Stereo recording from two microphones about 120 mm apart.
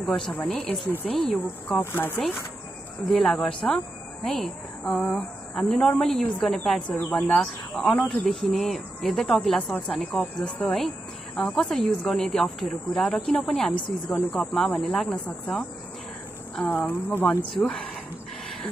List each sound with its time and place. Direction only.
0.0 s speech: 5° left (ahead or behind)
1.8 s speech: 15° left (ahead or behind)
3.1 s speech: 5° left (ahead or behind)
16.6 s speech: 15° left (ahead or behind)
17.6 s speech: 5° left (ahead or behind)